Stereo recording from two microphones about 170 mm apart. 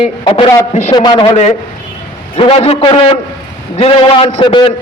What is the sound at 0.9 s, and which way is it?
A man's voice, 25° left (ahead or behind).